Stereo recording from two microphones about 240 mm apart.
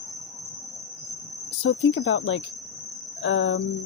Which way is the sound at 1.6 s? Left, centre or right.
Left.